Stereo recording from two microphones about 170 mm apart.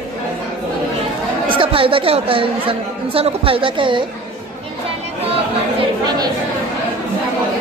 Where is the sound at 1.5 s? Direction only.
30° right (ahead or behind).